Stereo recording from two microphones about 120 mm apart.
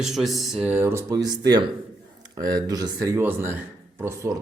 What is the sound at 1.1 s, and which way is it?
Speech, 35° right (ahead or behind).